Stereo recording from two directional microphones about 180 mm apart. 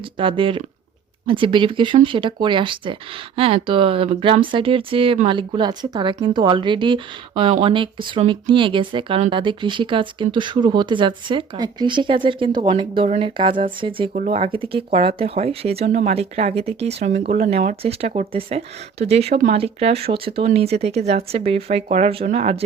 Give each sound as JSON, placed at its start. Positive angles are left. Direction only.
{"t": 0.2, "sound": "speech", "side_deg": -30}